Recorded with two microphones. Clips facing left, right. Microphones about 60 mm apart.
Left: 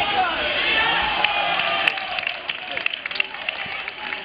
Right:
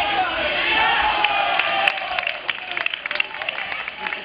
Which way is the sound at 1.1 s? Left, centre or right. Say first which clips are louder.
Right 2 dB; centre.